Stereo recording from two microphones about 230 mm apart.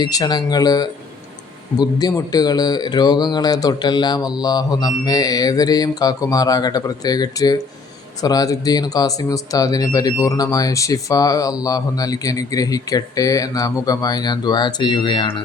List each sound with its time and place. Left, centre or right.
0.0 s speech: centre